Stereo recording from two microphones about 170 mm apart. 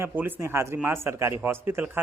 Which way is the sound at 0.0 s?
10° right (ahead or behind).